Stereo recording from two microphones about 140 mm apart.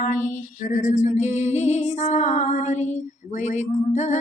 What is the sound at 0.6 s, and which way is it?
Music, 65° left (ahead or behind).